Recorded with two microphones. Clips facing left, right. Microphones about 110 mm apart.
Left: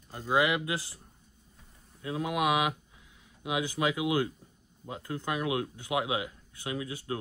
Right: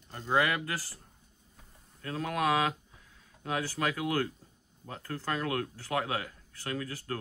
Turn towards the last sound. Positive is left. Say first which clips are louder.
# left 1 dB
turn(degrees=15)  # may be behind; listen again after turning